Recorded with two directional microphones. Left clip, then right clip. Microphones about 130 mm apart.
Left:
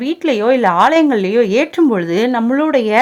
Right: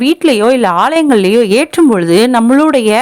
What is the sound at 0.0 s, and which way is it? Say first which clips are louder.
A woman's voice: right 6 dB; 35° right (ahead or behind).